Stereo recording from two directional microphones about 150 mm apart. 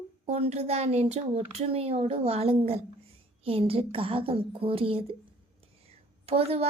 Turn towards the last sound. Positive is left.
turn(degrees=-40)  # may be behind; listen again after turning